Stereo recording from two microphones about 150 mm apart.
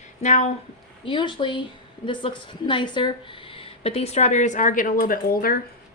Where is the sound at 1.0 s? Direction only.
35° left (ahead or behind); by 5.5 s 80° left.